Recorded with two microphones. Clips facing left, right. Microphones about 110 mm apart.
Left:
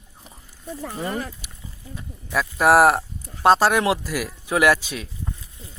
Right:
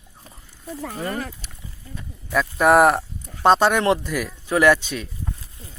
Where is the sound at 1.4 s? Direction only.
15° left (ahead or behind).